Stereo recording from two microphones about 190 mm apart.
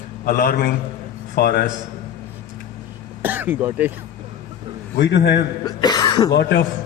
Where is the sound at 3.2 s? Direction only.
10° right (ahead or behind).